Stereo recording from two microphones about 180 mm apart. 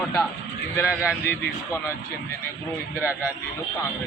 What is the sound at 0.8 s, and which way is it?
Speech, 10° right (ahead or behind).